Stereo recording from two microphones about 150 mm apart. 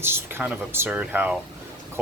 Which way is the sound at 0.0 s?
15° right (ahead or behind).